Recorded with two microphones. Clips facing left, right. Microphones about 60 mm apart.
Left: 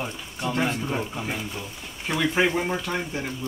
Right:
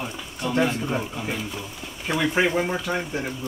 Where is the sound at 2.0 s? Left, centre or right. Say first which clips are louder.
Right 1 dB; centre.